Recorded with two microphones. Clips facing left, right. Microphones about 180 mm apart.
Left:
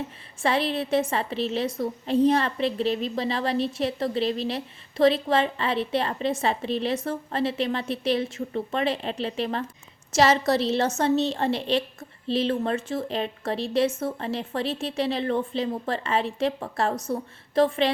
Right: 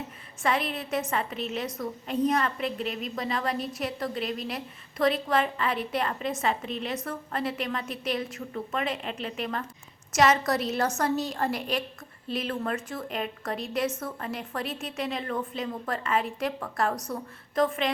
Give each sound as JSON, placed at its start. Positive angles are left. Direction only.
{"t": 0.4, "sound": "a woman's voice", "side_deg": 30}